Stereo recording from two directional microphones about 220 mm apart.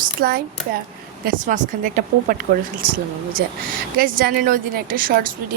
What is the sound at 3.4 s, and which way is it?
A woman's voice, 45° right (ahead or behind).